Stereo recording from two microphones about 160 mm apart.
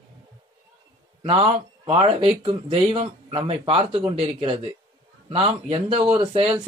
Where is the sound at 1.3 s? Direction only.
35° right (ahead or behind).